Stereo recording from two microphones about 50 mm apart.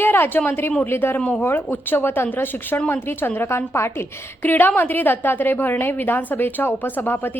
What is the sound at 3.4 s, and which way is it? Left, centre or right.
Speech, left.